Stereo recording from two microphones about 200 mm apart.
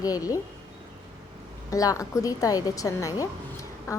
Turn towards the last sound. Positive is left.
turn(degrees=15)  # may be behind; listen again after turning